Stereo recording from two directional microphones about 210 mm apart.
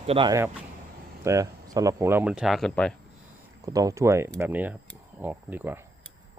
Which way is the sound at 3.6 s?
15° right (ahead or behind).